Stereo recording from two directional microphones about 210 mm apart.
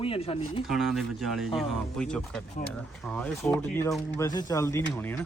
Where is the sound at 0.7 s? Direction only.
Centre (ahead or behind).